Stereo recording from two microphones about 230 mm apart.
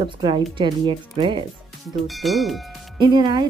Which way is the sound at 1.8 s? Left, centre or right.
Centre.